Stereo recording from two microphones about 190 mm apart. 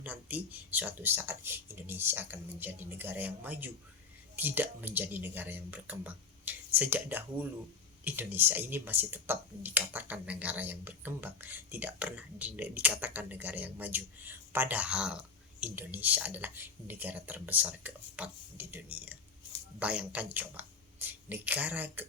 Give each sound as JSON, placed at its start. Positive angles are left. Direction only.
{"t": 0.0, "sound": "speech", "side_deg": -10}